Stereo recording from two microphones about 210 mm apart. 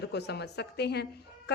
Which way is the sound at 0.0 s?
55° left (ahead or behind).